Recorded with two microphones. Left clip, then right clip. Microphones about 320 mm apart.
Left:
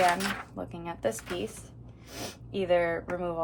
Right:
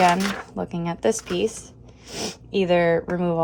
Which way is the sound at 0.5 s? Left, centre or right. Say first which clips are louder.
Right 9 dB; right.